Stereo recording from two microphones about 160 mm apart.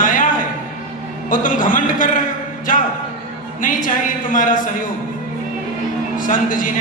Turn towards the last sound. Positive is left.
turn(degrees=55)  # may be behind; listen again after turning